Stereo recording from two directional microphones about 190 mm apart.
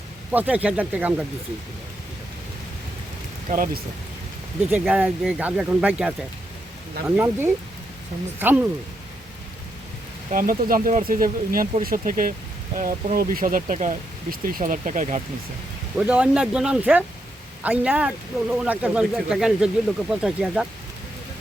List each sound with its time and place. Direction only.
0.3 s speech: 10° right (ahead or behind)
3.5 s speech: 45° right (ahead or behind)
4.7 s speech: 10° right (ahead or behind)
7.2 s speech: 10° right (ahead or behind)
10.3 s speech: 45° right (ahead or behind)
16.0 s speech: 5° right (ahead or behind)